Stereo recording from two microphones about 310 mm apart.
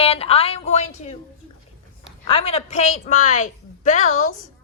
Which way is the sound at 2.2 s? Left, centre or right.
Centre.